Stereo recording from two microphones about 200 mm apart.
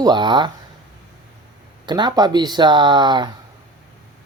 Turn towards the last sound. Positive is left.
turn(degrees=-20)  # may be behind; listen again after turning